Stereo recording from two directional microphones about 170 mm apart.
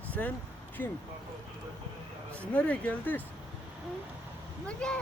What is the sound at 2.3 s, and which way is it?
Speech, 10° left (ahead or behind).